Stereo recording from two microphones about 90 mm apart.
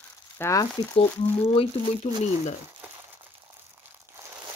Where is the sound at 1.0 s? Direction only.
90° left.